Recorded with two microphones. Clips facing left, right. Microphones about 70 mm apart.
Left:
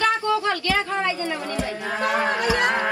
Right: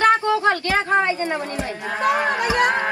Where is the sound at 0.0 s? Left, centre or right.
Right.